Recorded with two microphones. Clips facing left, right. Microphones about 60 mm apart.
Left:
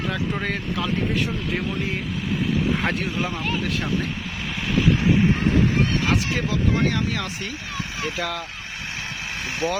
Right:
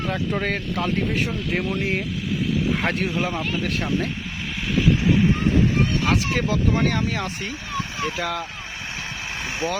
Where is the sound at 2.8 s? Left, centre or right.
Centre.